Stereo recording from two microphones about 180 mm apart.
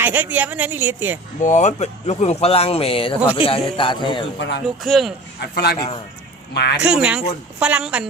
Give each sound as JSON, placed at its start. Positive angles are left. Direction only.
{"t": 0.0, "sound": "a woman's voice", "side_deg": -10}
{"t": 1.5, "sound": "a man's voice", "side_deg": 40}
{"t": 4.4, "sound": "speech", "side_deg": 80}
{"t": 4.8, "sound": "speech", "side_deg": 0}
{"t": 5.4, "sound": "a man's voice", "side_deg": 65}
{"t": 6.8, "sound": "a woman's voice", "side_deg": -5}